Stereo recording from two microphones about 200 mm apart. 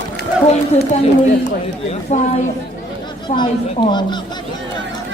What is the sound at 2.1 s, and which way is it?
Speech, 35° left (ahead or behind).